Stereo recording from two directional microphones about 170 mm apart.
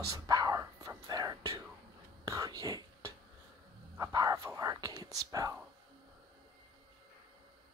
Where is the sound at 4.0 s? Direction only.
20° right (ahead or behind).